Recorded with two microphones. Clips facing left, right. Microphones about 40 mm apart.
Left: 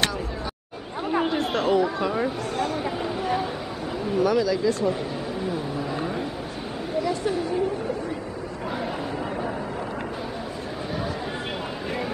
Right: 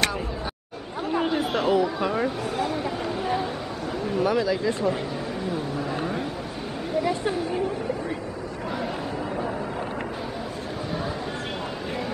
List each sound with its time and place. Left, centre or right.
1.0 s speech: centre
3.2 s a sound: centre
4.2 s speech: centre